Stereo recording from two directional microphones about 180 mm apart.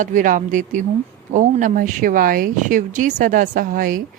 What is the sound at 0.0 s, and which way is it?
Speech, 45° right (ahead or behind).